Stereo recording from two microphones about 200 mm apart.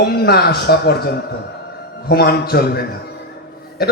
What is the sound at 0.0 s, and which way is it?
A man's voice, 50° left (ahead or behind).